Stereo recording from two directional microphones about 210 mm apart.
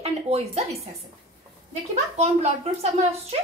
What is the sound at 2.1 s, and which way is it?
A woman's voice, 30° right (ahead or behind).